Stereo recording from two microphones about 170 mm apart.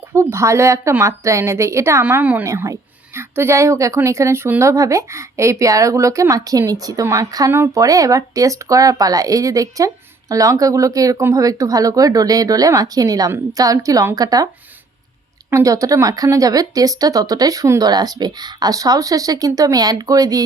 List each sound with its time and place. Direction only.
0.1 s a woman's voice: 15° right (ahead or behind)